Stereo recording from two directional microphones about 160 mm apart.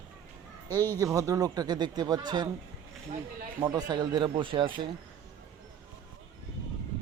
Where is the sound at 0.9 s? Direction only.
20° right (ahead or behind).